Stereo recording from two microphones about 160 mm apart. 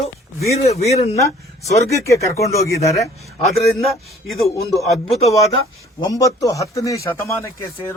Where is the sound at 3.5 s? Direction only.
Centre (ahead or behind).